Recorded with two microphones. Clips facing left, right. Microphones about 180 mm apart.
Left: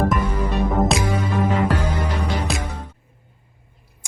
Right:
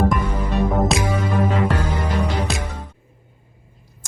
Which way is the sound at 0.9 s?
Centre (ahead or behind).